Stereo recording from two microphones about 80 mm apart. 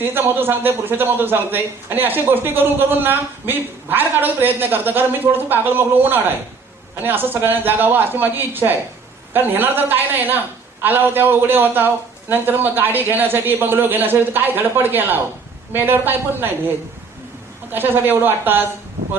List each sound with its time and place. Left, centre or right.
0.0 s speech: right